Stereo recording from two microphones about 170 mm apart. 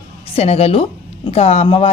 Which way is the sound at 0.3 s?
40° left (ahead or behind).